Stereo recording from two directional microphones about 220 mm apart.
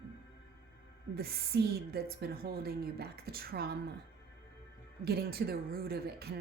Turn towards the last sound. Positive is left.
turn(degrees=-45)  # may be behind; listen again after turning